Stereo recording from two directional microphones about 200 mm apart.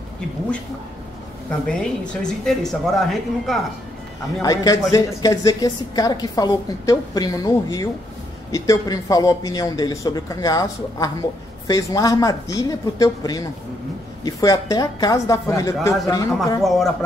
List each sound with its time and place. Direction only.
1.7 s a woman's voice: 5° left (ahead or behind)
4.4 s a man's voice: 20° left (ahead or behind)
16.6 s a woman's voice: centre (ahead or behind)